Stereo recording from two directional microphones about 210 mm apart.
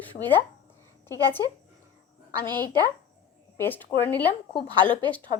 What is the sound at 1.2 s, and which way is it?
Speech, 20° right (ahead or behind).